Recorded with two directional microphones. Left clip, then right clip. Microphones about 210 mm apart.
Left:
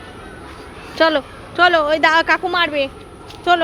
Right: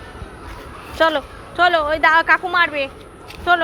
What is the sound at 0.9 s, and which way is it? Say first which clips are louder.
A woman's voice: left 2 dB; 20° left (ahead or behind).